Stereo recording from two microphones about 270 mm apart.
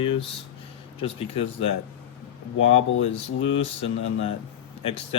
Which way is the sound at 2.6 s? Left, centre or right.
Left.